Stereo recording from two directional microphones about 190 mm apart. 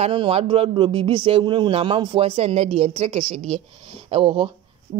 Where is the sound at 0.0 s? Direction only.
30° right (ahead or behind).